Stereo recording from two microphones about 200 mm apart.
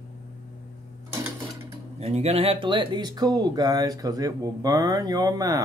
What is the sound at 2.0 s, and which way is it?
Speech, 30° right (ahead or behind).